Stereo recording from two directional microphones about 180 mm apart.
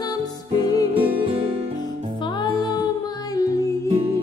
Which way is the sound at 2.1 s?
25° left (ahead or behind).